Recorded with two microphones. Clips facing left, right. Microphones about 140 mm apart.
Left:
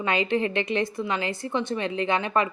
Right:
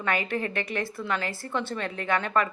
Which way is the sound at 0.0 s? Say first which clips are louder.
Left 4 dB; 20° left (ahead or behind).